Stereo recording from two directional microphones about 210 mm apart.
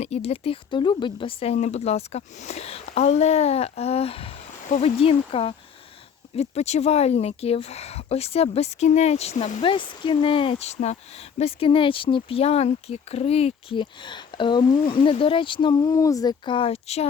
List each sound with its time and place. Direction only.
0.0 s speech: 30° left (ahead or behind)